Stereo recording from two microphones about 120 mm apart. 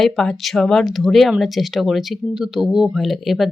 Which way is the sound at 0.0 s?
5° left (ahead or behind).